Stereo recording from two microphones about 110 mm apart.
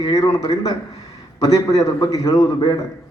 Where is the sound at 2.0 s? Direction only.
35° left (ahead or behind).